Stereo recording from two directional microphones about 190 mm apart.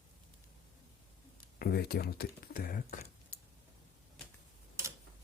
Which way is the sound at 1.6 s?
55° left (ahead or behind).